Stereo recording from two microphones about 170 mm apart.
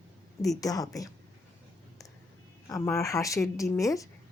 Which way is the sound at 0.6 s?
20° left (ahead or behind).